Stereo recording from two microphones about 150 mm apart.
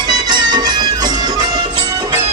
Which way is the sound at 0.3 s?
30° right (ahead or behind).